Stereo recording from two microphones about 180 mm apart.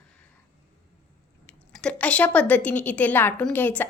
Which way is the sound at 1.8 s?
5° left (ahead or behind).